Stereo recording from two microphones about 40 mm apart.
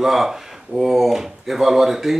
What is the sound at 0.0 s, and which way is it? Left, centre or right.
Speech, centre.